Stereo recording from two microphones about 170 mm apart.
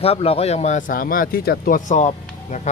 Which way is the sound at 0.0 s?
35° left (ahead or behind).